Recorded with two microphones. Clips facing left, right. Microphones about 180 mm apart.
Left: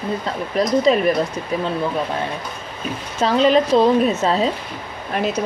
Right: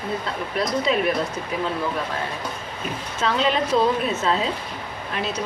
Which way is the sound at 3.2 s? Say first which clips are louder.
Left 7 dB; 35° left (ahead or behind).